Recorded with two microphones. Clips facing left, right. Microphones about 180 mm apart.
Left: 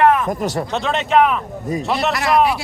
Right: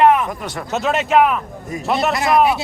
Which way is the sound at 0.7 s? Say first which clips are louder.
Right 4 dB; 5° right (ahead or behind).